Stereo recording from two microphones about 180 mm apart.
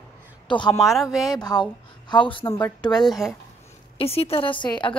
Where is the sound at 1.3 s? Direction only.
20° left (ahead or behind).